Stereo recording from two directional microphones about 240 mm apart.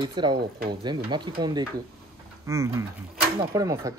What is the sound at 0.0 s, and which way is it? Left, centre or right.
Speech, centre.